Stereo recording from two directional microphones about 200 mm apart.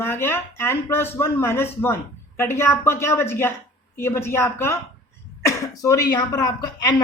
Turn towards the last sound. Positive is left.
turn(degrees=20)  # may be behind; listen again after turning